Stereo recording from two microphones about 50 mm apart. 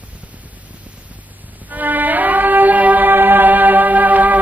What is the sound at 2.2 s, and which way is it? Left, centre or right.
Music, right.